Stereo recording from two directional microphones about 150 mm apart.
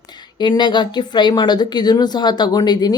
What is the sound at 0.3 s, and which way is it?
Speech, 30° left (ahead or behind).